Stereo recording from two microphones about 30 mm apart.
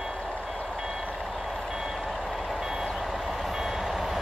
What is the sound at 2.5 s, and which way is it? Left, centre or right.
Reversing beeps, centre.